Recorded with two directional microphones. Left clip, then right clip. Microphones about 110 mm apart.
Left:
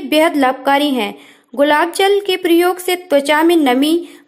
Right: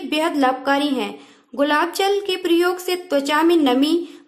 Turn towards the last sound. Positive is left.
turn(degrees=30)  # may be behind; listen again after turning